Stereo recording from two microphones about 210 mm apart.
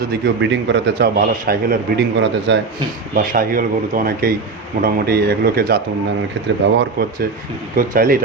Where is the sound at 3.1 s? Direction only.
40° right (ahead or behind).